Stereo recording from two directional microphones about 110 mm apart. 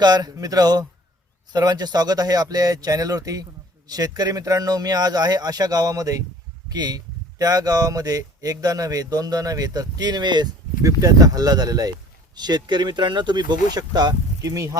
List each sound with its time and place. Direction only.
0.0 s speech: 35° right (ahead or behind)